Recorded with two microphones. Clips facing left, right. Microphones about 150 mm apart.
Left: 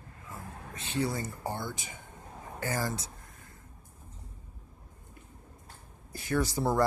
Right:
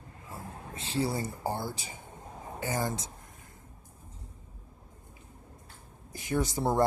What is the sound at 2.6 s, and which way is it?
Speech, 20° right (ahead or behind).